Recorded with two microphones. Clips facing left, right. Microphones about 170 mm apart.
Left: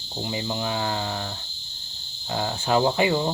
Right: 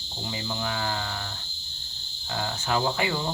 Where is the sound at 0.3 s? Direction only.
25° left (ahead or behind).